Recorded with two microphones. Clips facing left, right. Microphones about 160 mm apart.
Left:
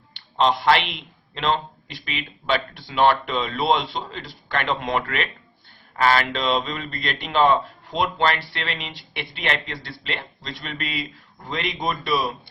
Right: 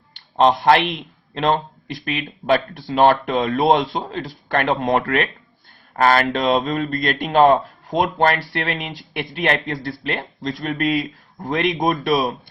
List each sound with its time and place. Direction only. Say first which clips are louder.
0.3 s a man's voice: right 4 dB; 45° right (ahead or behind)